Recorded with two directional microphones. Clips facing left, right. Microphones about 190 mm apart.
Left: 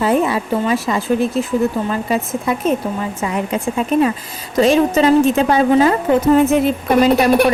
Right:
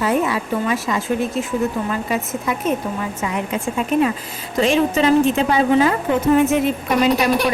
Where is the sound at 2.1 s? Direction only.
30° left (ahead or behind).